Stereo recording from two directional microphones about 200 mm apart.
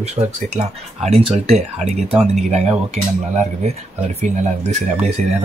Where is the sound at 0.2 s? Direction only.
30° right (ahead or behind).